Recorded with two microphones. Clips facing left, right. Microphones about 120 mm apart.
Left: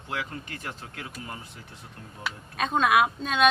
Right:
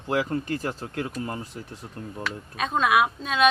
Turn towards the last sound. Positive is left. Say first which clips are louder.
# right 1 dB
turn(degrees=0)  # may be behind; listen again after turning